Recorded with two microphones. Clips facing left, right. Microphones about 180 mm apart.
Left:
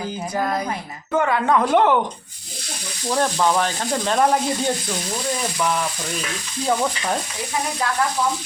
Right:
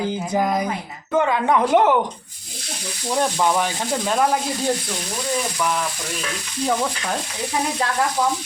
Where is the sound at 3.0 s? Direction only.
15° right (ahead or behind).